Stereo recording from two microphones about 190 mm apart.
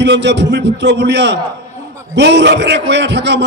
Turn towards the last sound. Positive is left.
turn(degrees=-65)  # may be behind; listen again after turning